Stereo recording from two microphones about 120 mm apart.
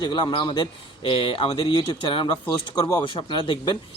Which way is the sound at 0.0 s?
40° left (ahead or behind).